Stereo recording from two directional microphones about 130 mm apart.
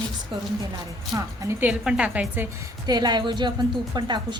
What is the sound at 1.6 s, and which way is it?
Speech, 10° right (ahead or behind).